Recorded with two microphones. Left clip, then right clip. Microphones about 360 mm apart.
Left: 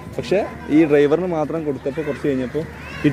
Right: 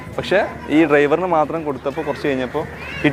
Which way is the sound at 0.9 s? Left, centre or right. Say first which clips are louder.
Right 2 dB; centre.